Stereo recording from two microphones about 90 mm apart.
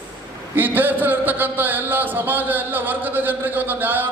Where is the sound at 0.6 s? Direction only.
20° right (ahead or behind).